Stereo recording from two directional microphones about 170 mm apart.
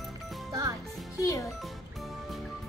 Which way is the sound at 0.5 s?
20° right (ahead or behind).